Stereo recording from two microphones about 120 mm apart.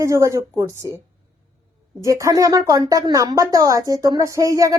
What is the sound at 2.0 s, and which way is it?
Speech, 30° right (ahead or behind).